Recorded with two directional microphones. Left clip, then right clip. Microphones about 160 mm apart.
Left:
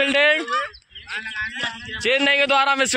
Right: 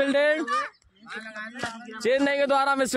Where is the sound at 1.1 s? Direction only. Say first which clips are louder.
Left 9 dB; 75° right (ahead or behind).